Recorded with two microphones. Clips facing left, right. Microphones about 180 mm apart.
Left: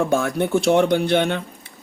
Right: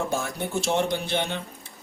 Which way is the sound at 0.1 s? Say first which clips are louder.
Left 9 dB; 60° left (ahead or behind).